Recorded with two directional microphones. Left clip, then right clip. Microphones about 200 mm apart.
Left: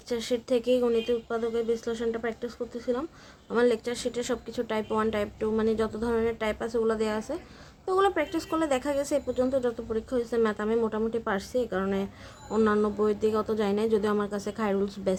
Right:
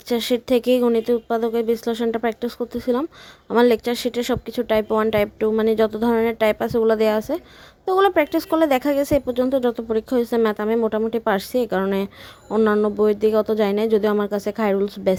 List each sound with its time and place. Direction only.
0.1 s a woman's voice: 45° right (ahead or behind)
12.5 s a woman's voice: 35° right (ahead or behind)